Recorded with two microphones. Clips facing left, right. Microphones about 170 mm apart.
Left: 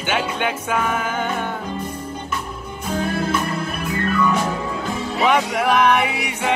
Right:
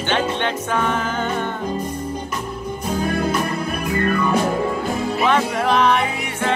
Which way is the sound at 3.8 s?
45° right (ahead or behind).